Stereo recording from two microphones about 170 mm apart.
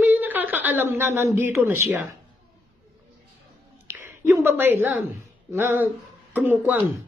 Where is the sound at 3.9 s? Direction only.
15° right (ahead or behind).